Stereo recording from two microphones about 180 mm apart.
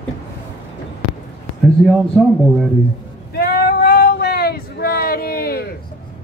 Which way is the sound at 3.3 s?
55° left (ahead or behind).